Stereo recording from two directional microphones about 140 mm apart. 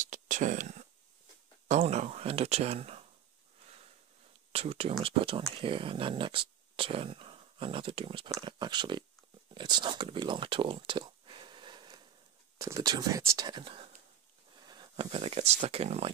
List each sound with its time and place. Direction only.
0.0 s a sound: 65° right (ahead or behind)
1.7 s speech: 55° right (ahead or behind)
4.5 s speech: 45° right (ahead or behind); by 13.5 s 20° right (ahead or behind)
13.5 s speech: 35° right (ahead or behind)
14.7 s a sound: 30° right (ahead or behind)
15.0 s speech: 45° right (ahead or behind)